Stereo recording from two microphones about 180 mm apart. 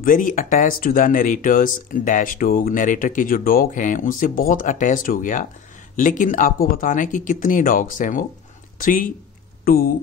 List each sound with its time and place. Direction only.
0.0 s speech: 50° left (ahead or behind)